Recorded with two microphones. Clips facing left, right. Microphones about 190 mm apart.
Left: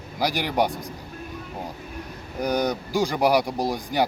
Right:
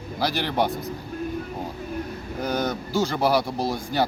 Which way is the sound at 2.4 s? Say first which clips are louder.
Left 2 dB; 15° left (ahead or behind).